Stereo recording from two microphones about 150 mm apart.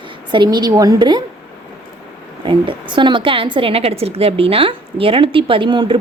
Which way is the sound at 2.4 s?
30° right (ahead or behind).